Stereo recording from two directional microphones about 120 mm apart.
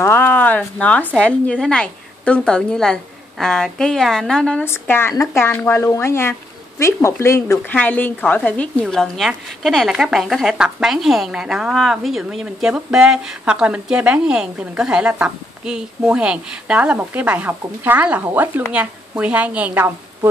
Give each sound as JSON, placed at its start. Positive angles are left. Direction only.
{"t": 0.0, "sound": "a woman's voice", "side_deg": 15}
{"t": 4.6, "sound": "speech", "side_deg": 20}
{"t": 7.7, "sound": "a woman's voice", "side_deg": 15}